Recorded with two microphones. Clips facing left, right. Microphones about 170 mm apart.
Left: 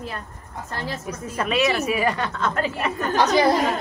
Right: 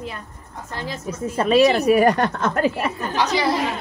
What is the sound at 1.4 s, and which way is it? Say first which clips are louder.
A woman's voice: right 6 dB; 35° right (ahead or behind).